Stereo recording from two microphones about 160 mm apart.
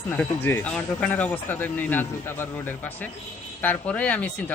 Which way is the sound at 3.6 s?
10° left (ahead or behind).